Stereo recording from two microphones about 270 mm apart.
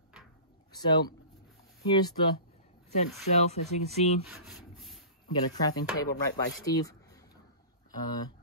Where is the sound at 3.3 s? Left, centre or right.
Left.